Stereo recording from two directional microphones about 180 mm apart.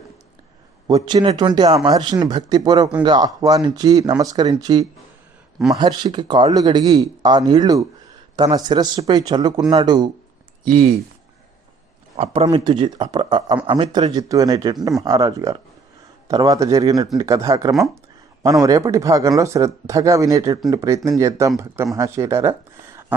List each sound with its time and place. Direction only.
0.9 s speech: 20° right (ahead or behind)
12.1 s speech: 35° right (ahead or behind); by 23.1 s 15° right (ahead or behind)